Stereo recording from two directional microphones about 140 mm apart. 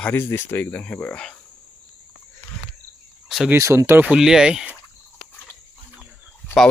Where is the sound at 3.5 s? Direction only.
20° right (ahead or behind).